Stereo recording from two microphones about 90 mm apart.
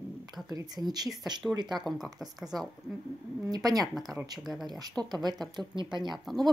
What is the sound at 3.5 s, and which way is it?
Speech, 45° right (ahead or behind).